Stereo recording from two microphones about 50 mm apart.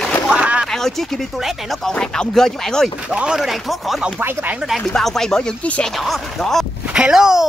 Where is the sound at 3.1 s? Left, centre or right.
Right.